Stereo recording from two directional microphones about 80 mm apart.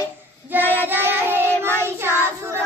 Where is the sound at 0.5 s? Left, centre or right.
Right.